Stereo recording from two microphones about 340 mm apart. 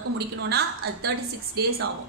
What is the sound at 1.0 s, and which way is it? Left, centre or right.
Speech, right.